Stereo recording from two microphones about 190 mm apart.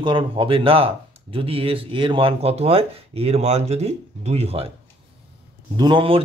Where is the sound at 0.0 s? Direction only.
25° right (ahead or behind).